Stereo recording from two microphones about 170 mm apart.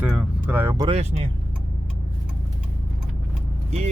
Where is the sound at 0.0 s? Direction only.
10° right (ahead or behind).